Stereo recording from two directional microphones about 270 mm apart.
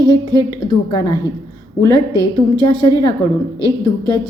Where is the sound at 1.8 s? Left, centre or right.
Centre.